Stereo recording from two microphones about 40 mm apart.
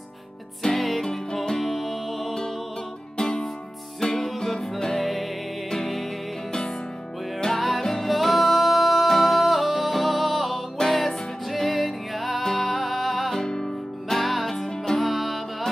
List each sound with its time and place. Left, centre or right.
0.7 s music: centre
1.0 s music: centre
3.2 s music: centre
5.0 s music: centre
7.3 s music: centre
13.5 s music: centre